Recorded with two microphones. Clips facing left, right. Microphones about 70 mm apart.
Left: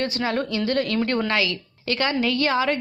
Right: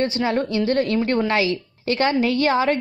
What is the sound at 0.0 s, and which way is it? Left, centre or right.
A woman's voice, right.